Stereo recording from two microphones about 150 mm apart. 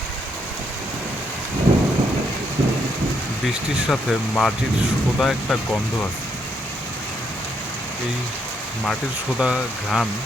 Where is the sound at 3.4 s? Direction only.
5° right (ahead or behind).